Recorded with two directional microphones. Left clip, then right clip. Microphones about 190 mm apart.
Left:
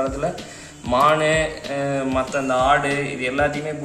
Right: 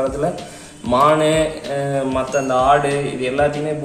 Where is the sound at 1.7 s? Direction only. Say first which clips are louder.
Right 2 dB; 25° right (ahead or behind).